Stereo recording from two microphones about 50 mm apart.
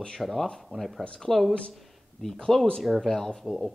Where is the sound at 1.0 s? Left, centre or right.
Centre.